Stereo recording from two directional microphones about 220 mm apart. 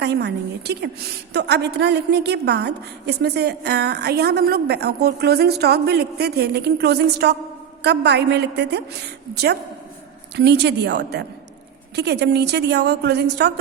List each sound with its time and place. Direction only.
0.0 s a woman's voice: 50° right (ahead or behind)